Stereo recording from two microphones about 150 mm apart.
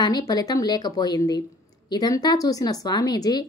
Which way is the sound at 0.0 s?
25° left (ahead or behind).